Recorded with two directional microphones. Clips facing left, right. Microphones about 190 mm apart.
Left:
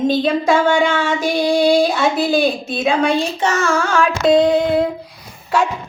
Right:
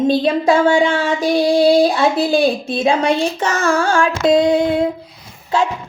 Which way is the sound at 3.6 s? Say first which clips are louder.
Right 4 dB; 30° right (ahead or behind).